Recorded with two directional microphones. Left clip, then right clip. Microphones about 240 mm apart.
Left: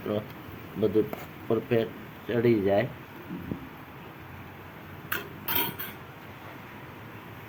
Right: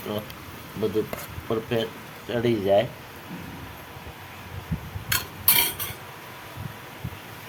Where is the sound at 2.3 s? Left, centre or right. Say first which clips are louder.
Right 2 dB; centre.